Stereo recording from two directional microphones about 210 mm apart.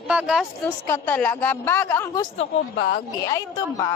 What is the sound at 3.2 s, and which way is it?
Speech, 15° left (ahead or behind).